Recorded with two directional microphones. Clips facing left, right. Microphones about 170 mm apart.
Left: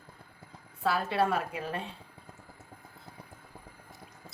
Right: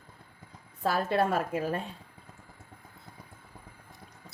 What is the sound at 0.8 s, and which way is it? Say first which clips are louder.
A woman's voice: right 1 dB; 45° right (ahead or behind).